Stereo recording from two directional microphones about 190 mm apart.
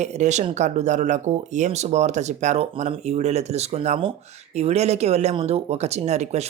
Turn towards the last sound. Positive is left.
turn(degrees=-35)  # may be behind; listen again after turning